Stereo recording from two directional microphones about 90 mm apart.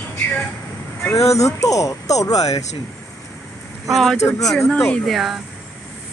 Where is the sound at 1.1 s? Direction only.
35° left (ahead or behind).